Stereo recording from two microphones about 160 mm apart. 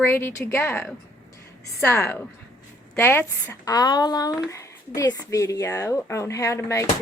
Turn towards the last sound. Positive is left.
turn(degrees=20)  # may be behind; listen again after turning